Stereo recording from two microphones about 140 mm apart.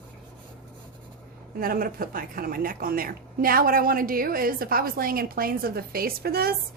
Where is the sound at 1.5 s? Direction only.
90° right.